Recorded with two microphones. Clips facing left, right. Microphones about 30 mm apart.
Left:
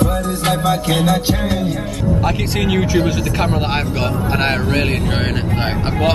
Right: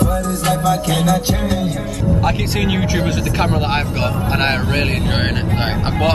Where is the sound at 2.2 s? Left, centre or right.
Centre.